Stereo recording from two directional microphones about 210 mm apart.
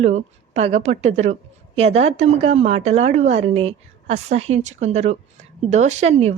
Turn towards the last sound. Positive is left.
turn(degrees=-30)  # may be behind; listen again after turning